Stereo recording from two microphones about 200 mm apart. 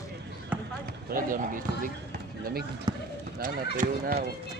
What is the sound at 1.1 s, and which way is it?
Speech, 40° right (ahead or behind).